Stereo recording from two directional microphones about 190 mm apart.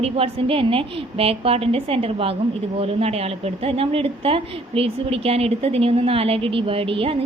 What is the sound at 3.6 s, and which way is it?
A woman's voice, 30° right (ahead or behind).